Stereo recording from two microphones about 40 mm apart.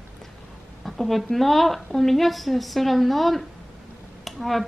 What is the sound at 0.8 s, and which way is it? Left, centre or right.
A woman's voice, centre.